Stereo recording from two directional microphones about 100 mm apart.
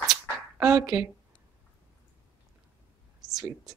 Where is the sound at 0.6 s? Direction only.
35° right (ahead or behind).